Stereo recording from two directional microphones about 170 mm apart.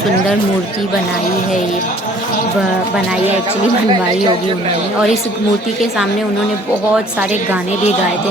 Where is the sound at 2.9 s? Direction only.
5° right (ahead or behind).